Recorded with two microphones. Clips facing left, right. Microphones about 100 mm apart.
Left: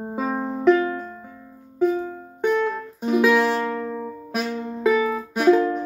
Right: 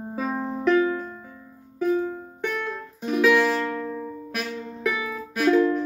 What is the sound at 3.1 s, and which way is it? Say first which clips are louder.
Music: left 2 dB; 30° left (ahead or behind).